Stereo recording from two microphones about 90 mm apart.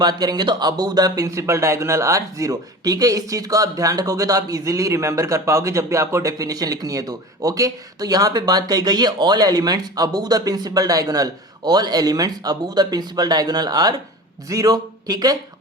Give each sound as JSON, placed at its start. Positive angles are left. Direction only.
{"t": 0.0, "sound": "speech", "side_deg": -50}